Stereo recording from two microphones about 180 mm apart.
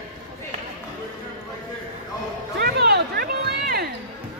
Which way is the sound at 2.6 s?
60° right (ahead or behind).